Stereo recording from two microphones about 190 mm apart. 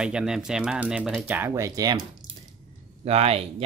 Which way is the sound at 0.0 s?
5° right (ahead or behind).